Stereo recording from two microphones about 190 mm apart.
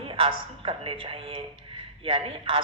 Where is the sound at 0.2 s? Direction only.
25° right (ahead or behind).